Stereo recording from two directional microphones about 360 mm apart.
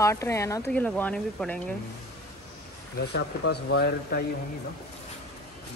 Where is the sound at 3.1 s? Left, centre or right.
Left.